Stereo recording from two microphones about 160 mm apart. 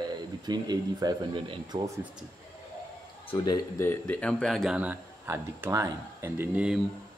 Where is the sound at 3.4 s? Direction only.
20° left (ahead or behind); by 6.8 s 10° right (ahead or behind).